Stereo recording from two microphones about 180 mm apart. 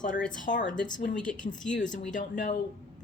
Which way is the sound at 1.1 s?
5° left (ahead or behind).